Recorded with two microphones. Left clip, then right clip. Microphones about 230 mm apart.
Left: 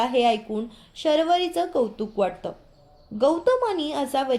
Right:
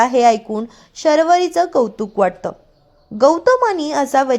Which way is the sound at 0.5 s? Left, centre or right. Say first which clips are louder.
Right 6 dB; right.